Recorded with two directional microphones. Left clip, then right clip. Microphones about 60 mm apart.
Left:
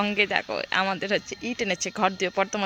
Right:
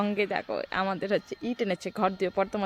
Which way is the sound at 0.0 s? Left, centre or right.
Centre.